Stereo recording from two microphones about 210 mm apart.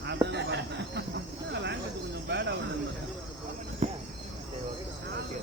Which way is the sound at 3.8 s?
35° right (ahead or behind).